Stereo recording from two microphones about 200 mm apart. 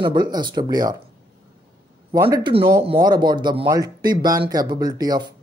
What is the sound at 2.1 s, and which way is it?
Speech, 20° right (ahead or behind).